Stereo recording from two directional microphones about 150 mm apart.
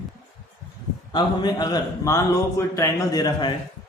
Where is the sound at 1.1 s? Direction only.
25° left (ahead or behind).